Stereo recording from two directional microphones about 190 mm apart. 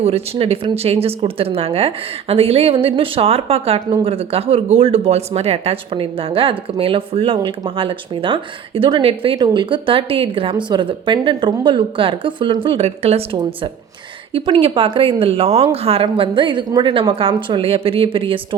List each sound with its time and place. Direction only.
0.0 s speech: 30° right (ahead or behind)